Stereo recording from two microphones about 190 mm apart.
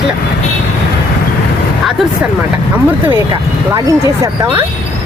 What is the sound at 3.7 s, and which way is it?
Speech, 15° right (ahead or behind).